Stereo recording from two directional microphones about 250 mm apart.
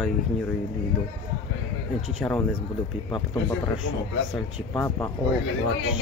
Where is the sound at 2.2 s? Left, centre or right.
Centre.